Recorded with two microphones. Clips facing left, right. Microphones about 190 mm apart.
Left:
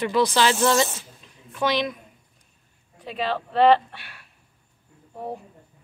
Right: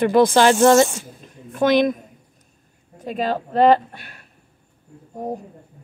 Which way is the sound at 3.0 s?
45° right (ahead or behind).